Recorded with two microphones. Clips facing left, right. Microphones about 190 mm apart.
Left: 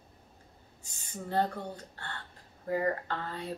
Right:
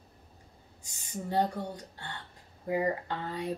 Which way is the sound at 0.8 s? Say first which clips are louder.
Right 3 dB; 15° right (ahead or behind).